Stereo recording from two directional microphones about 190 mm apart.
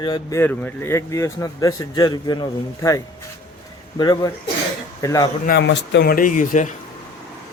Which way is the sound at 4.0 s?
20° left (ahead or behind).